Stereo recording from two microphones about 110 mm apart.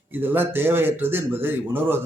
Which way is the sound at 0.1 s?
20° right (ahead or behind).